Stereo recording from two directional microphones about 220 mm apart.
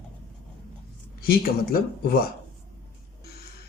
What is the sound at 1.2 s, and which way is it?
Speech, 40° left (ahead or behind).